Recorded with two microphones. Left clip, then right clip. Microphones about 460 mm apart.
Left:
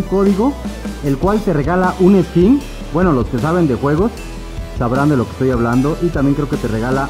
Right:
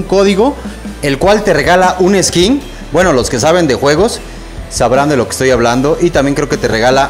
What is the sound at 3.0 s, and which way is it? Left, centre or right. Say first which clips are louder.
Speech: right 7 dB; centre.